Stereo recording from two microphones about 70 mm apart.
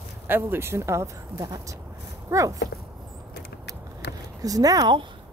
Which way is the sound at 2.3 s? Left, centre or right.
Right.